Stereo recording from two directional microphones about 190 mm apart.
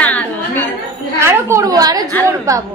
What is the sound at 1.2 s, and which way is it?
A woman's voice, 15° right (ahead or behind).